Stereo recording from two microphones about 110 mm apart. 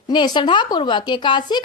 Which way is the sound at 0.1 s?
45° left (ahead or behind).